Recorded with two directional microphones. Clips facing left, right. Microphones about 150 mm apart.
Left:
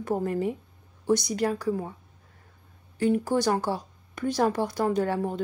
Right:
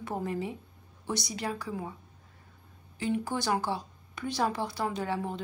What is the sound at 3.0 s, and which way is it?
A woman's voice, 45° left (ahead or behind).